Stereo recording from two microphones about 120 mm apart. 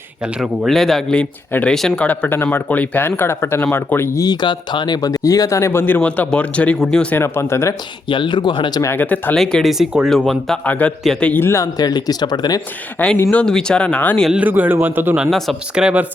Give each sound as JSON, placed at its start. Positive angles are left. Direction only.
{"t": 0.3, "sound": "speech", "side_deg": -5}
{"t": 2.0, "sound": "speech", "side_deg": 15}
{"t": 7.2, "sound": "speech", "side_deg": 20}
{"t": 8.0, "sound": "speech", "side_deg": 40}
{"t": 8.8, "sound": "speech", "side_deg": 20}
{"t": 9.3, "sound": "speech", "side_deg": 5}
{"t": 10.7, "sound": "speech", "side_deg": 15}
{"t": 13.0, "sound": "speech", "side_deg": 10}
{"t": 14.3, "sound": "a man's voice", "side_deg": -10}
{"t": 15.2, "sound": "a man's voice", "side_deg": 0}